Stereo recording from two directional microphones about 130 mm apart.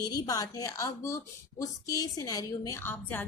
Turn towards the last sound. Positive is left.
turn(degrees=15)  # may be behind; listen again after turning